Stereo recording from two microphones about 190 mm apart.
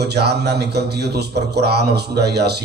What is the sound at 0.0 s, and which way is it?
A man's voice, 60° right (ahead or behind).